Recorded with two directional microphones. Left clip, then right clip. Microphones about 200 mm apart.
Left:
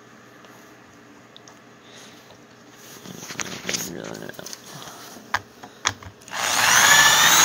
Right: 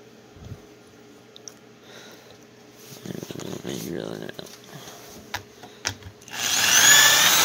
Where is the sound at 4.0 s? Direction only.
25° right (ahead or behind).